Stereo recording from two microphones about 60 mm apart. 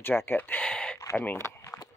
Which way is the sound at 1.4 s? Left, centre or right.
Left.